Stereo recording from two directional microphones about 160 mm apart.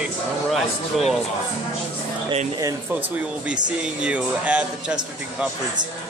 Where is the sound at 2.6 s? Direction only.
20° right (ahead or behind).